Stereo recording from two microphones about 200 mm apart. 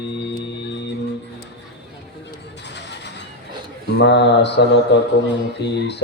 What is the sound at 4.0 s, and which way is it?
Speech, 60° left (ahead or behind).